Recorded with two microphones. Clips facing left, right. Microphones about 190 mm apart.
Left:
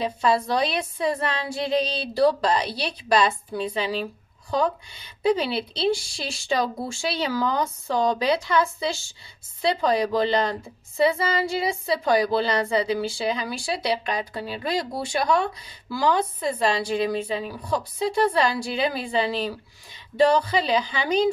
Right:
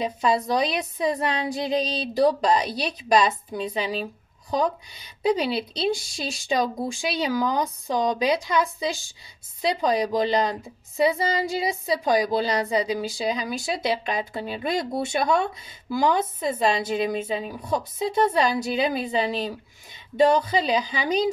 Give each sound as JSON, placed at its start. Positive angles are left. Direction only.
{"t": 0.0, "sound": "a woman's voice", "side_deg": -20}